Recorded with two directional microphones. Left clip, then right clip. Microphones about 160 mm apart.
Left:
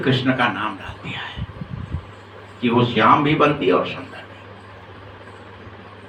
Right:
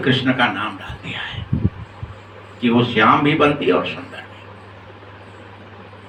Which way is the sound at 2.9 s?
20° right (ahead or behind).